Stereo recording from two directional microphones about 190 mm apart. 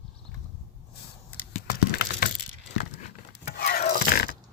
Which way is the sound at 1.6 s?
50° left (ahead or behind).